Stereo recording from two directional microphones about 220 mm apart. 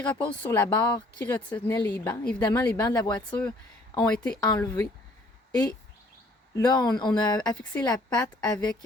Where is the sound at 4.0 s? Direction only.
5° left (ahead or behind).